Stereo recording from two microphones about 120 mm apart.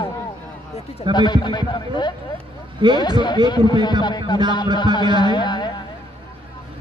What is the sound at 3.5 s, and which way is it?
Speech, 40° left (ahead or behind).